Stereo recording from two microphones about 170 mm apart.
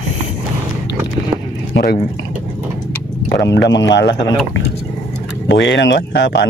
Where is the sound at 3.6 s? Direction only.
90° left.